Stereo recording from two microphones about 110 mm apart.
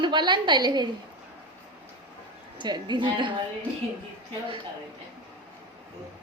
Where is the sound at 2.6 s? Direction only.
45° right (ahead or behind).